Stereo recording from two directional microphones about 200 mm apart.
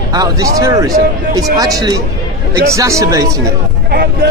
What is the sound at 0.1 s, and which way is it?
Speech, 15° right (ahead or behind).